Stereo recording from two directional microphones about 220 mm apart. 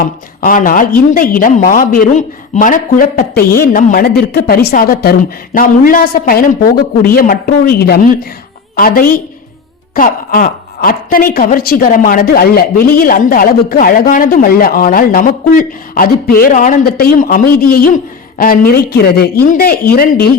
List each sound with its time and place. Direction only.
0.0 s a woman's voice: 40° left (ahead or behind)